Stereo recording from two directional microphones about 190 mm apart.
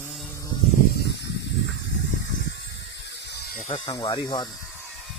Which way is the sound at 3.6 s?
25° left (ahead or behind).